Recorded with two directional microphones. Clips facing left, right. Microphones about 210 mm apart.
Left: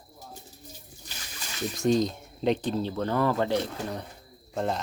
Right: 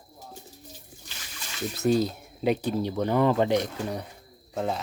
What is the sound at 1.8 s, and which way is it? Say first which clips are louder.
Speech: right 1 dB; 5° right (ahead or behind).